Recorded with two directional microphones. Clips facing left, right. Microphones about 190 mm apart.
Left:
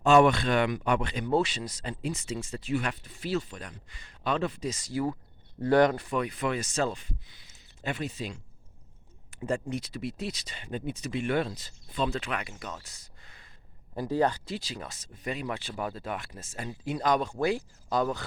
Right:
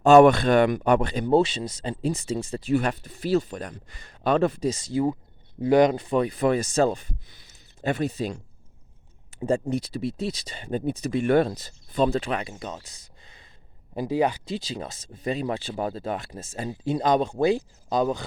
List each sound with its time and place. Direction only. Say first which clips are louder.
0.0 s speech: right 7 dB; 45° right (ahead or behind)
4.7 s speech: right 6 dB; 25° right (ahead or behind); by 8.4 s 40° right (ahead or behind)
9.3 s speech: right 7 dB; 30° right (ahead or behind); by 14.5 s 10° right (ahead or behind)
14.5 s speech: right 5 dB; 25° right (ahead or behind)